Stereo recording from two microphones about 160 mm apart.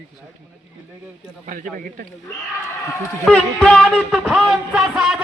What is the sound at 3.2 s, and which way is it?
A man's voice, 5° left (ahead or behind).